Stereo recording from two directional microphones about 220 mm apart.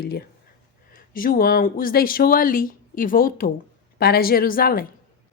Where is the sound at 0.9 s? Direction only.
40° left (ahead or behind).